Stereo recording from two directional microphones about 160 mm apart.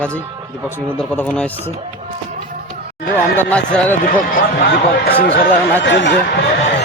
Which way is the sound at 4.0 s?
70° left (ahead or behind).